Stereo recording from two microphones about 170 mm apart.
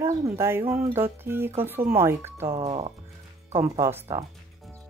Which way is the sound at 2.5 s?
30° right (ahead or behind).